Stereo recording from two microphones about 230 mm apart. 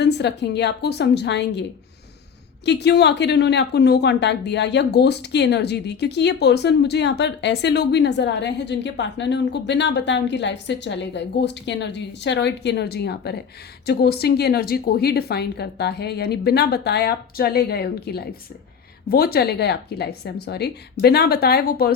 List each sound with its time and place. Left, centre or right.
0.0 s speech: left
2.6 s speech: left